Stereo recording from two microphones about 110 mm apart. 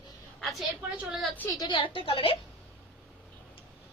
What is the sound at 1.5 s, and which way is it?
Speech, 40° left (ahead or behind).